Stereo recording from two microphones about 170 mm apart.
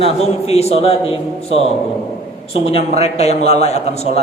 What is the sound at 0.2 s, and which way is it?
A man's voice, 40° left (ahead or behind).